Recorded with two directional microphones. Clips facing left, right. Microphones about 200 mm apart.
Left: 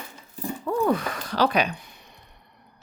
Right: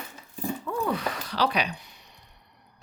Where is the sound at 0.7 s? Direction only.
45° left (ahead or behind).